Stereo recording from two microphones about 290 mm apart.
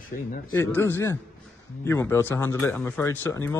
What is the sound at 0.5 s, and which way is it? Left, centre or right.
A man's voice, centre.